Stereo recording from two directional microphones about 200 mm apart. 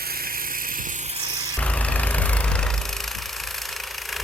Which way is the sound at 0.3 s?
45° right (ahead or behind).